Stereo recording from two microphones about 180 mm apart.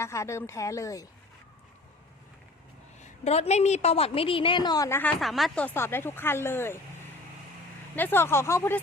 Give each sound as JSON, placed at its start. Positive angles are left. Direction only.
{"t": 0.0, "sound": "speech", "side_deg": 15}
{"t": 3.0, "sound": "a woman's voice", "side_deg": 35}
{"t": 5.2, "sound": "speech", "side_deg": 0}
{"t": 7.9, "sound": "speech", "side_deg": 10}